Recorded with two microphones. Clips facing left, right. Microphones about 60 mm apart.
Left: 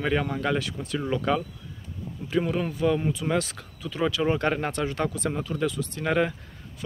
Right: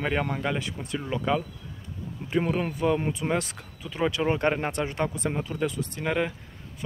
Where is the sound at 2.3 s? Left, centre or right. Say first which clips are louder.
Even; right.